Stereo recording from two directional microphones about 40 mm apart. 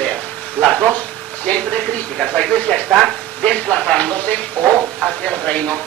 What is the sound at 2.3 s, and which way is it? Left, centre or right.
A man's voice, left.